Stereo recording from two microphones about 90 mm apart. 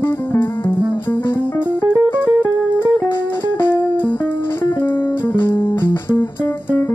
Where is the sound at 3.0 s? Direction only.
25° left (ahead or behind).